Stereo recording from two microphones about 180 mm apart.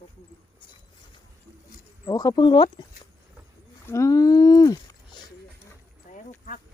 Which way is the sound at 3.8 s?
15° left (ahead or behind).